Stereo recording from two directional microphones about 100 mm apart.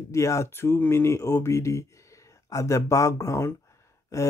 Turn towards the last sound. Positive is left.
turn(degrees=30)  # may be behind; listen again after turning